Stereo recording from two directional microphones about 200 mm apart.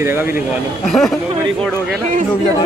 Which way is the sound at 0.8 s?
Centre (ahead or behind).